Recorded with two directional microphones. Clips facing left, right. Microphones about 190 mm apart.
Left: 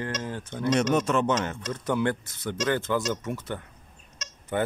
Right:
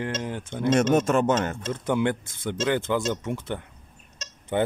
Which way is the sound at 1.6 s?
20° right (ahead or behind).